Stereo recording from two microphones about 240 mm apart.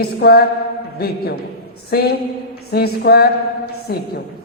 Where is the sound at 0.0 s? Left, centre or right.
Left.